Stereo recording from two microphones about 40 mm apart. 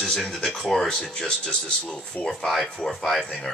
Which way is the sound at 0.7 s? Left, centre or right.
Centre.